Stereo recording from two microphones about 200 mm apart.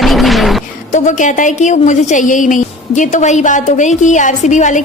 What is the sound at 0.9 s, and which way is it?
A woman's voice, 40° left (ahead or behind).